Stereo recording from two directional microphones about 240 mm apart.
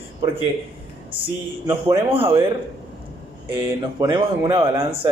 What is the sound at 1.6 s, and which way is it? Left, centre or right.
Speech, centre.